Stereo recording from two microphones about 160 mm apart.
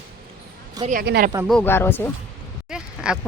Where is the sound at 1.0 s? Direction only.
90° right.